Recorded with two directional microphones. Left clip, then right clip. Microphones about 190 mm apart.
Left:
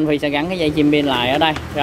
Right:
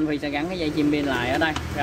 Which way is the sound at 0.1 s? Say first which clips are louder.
Left 8 dB; 40° left (ahead or behind).